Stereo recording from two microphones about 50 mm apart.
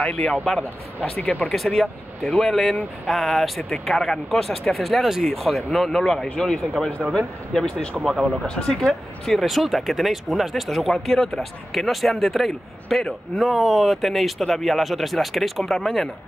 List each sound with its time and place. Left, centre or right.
0.0 s speech: left
1.5 s speech: centre